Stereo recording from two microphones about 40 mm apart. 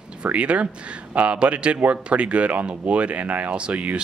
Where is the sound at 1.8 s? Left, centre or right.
Right.